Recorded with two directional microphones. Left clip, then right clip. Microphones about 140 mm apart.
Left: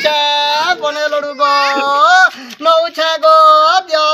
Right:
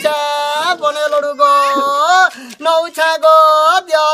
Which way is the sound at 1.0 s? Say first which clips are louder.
Right 1 dB; 45° right (ahead or behind).